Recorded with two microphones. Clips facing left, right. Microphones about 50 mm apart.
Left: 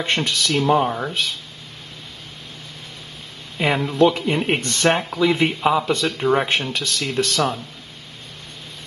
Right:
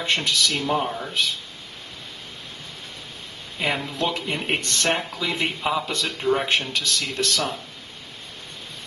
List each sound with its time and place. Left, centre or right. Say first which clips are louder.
0.1 s speech: left 1 dB; centre
0.8 s speech: left 6 dB; left
3.5 s speech: left 7 dB; centre